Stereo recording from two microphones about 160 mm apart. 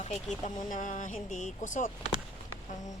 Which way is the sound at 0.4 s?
50° left (ahead or behind).